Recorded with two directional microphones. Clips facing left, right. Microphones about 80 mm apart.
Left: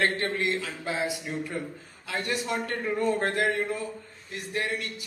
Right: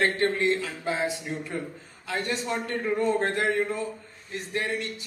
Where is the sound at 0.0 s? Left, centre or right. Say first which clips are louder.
Right 3 dB; right.